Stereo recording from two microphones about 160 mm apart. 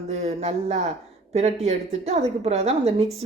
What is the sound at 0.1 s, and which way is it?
A woman's voice, 40° right (ahead or behind).